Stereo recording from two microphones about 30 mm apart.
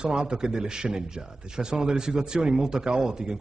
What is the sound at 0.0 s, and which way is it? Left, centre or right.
Speech, right.